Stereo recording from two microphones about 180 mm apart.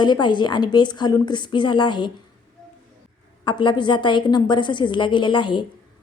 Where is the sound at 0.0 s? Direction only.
25° left (ahead or behind).